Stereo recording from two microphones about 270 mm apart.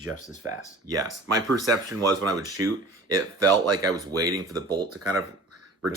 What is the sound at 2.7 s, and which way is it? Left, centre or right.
Speech, right.